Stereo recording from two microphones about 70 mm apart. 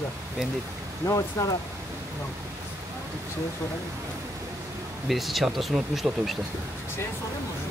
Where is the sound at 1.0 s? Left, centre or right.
Left.